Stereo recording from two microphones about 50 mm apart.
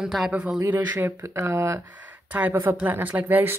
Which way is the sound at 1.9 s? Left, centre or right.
Right.